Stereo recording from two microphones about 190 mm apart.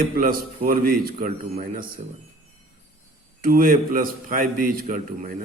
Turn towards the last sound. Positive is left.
turn(degrees=-45)  # may be behind; listen again after turning